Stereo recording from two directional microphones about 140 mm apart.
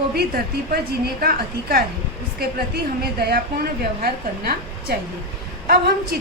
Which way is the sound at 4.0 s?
90° right.